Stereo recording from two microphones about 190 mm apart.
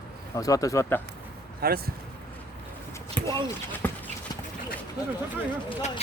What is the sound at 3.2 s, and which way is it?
Speech, 25° right (ahead or behind).